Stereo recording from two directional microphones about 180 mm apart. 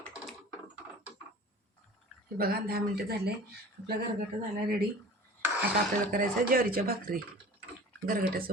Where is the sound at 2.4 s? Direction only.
60° right (ahead or behind).